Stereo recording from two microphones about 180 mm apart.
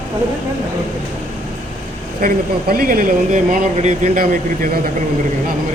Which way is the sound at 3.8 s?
40° right (ahead or behind).